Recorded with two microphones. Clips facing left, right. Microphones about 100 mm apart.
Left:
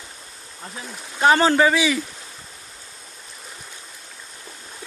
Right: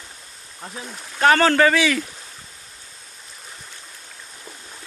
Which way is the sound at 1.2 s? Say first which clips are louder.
Even; 15° left (ahead or behind).